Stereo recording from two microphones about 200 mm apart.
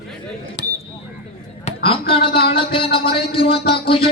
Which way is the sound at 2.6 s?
25° left (ahead or behind).